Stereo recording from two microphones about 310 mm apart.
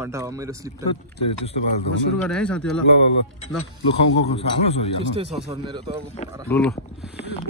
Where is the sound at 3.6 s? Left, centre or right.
Centre.